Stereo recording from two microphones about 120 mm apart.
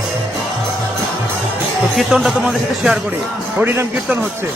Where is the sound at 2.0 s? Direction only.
5° right (ahead or behind).